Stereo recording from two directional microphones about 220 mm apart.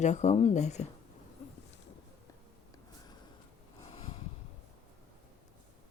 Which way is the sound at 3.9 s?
25° left (ahead or behind).